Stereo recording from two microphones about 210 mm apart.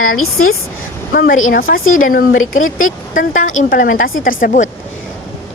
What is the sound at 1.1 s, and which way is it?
A woman's voice, 45° left (ahead or behind).